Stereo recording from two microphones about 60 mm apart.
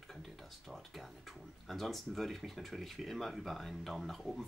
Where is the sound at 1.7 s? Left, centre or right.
Centre.